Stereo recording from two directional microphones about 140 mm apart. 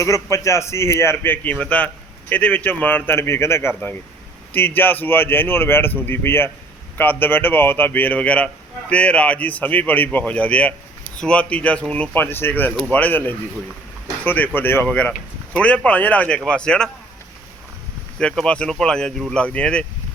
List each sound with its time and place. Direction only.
0.0 s a man's voice: 20° left (ahead or behind); by 16.9 s 5° left (ahead or behind)
18.2 s speech: 5° left (ahead or behind)